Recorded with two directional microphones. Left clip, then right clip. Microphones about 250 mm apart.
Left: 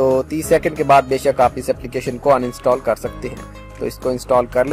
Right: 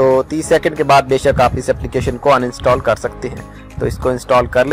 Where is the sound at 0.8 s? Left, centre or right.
Centre.